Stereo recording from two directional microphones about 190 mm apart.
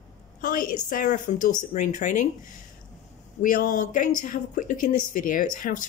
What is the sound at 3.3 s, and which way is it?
A woman's voice, 45° left (ahead or behind).